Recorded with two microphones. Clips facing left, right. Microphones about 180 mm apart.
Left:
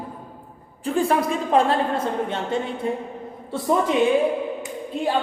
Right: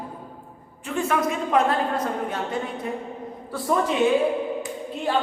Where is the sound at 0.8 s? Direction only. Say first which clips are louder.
Left 3 dB; 35° left (ahead or behind).